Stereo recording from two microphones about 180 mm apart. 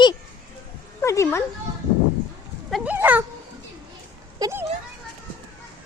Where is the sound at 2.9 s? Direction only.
10° right (ahead or behind).